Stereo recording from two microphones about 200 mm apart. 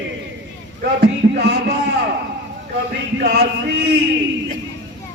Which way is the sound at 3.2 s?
55° right (ahead or behind).